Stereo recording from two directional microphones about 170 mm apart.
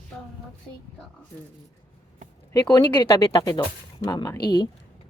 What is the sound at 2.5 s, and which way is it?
Speech, 25° left (ahead or behind).